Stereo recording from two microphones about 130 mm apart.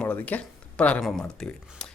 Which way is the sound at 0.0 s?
10° left (ahead or behind).